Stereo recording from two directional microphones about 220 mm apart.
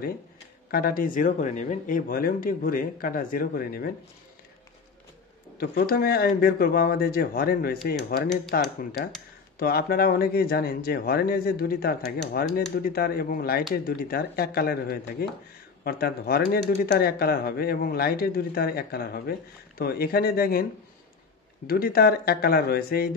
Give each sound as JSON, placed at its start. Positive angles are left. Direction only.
{"t": 0.7, "sound": "speech", "side_deg": 40}
{"t": 5.6, "sound": "speech", "side_deg": 45}
{"t": 21.6, "sound": "speech", "side_deg": 45}